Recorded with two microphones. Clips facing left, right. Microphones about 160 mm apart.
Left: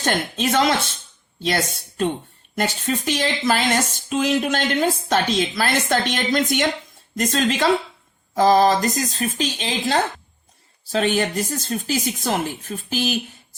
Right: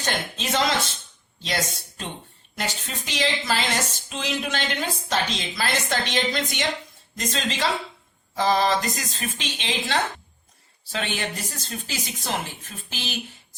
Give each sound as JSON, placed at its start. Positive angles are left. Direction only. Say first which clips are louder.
{"t": 0.0, "sound": "speech", "louder": "left 7 dB", "side_deg": 50}
{"t": 2.6, "sound": "speech", "louder": "left 8 dB", "side_deg": 50}